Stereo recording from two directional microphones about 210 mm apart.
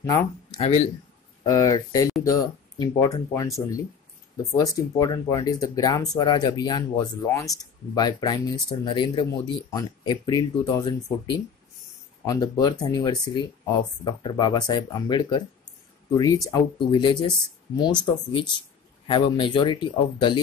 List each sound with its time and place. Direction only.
0.0 s speech: 15° left (ahead or behind)
1.4 s speech: 15° left (ahead or behind)